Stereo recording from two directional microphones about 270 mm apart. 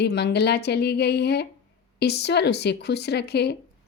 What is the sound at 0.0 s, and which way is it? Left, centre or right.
Speech, left.